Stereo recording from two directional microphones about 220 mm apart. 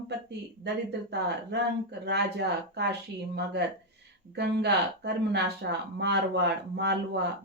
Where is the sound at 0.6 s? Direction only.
50° right (ahead or behind).